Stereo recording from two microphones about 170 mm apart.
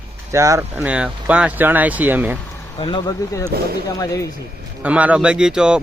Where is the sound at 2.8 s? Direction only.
30° left (ahead or behind).